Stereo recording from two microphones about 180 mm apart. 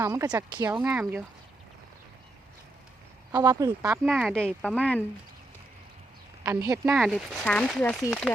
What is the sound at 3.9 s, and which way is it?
Speech, centre (ahead or behind).